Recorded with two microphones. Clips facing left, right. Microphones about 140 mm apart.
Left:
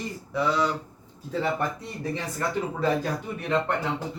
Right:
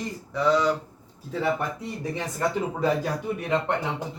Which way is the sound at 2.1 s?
15° right (ahead or behind).